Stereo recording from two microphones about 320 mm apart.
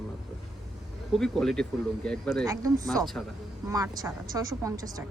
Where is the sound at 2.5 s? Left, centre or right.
Centre.